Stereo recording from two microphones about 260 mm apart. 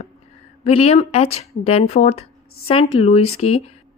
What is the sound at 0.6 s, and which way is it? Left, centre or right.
Speech, left.